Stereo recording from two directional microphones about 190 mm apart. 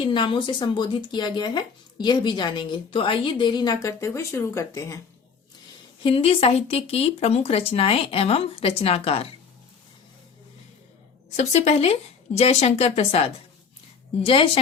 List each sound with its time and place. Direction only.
0.0 s speech: 25° left (ahead or behind)
6.0 s speech: 30° left (ahead or behind)
11.3 s speech: 35° left (ahead or behind)